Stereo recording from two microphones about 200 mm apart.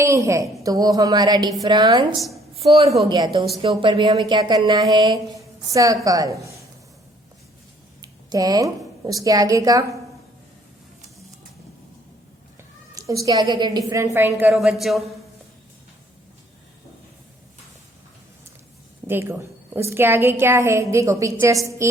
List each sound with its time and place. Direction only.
0.0 s a woman's voice: 15° right (ahead or behind)
8.0 s a woman's voice: 20° right (ahead or behind)
12.9 s a woman's voice: 15° right (ahead or behind); by 15.0 s centre (ahead or behind)
19.0 s a woman's voice: 10° right (ahead or behind)